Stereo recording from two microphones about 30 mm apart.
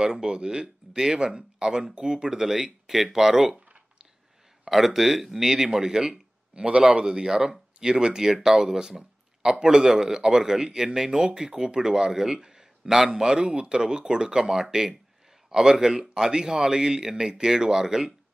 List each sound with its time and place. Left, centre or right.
0.0 s a man's voice: right
4.6 s speech: centre
5.8 s a man's voice: right
11.1 s a man's voice: right; by 12.4 s centre
12.4 s a sound: centre
13.1 s a man's voice: right